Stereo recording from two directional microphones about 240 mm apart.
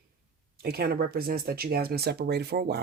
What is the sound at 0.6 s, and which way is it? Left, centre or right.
Speech, right.